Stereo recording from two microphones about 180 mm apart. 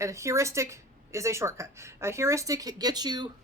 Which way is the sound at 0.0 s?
15° right (ahead or behind).